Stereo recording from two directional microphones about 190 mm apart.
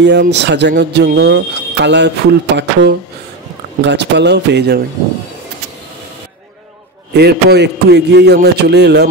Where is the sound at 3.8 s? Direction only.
65° right (ahead or behind).